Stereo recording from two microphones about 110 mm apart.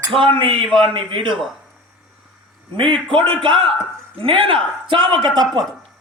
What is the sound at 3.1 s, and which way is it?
Speech, 50° right (ahead or behind).